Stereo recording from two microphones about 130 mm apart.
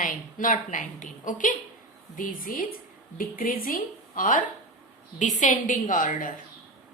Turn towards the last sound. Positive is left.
turn(degrees=90)